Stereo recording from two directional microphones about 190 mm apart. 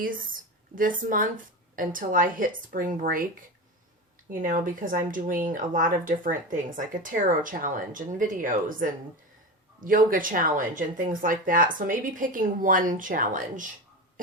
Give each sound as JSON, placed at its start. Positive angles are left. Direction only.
{"t": 0.0, "sound": "speech", "side_deg": -45}
{"t": 4.3, "sound": "speech", "side_deg": -45}